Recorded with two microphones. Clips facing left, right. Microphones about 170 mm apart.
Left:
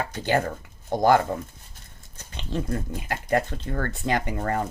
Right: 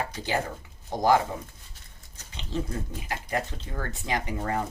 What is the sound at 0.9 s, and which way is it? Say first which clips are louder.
Speech: left 6 dB; 60° left (ahead or behind).